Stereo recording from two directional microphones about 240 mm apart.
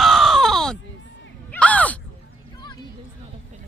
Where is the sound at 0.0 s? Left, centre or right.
Centre.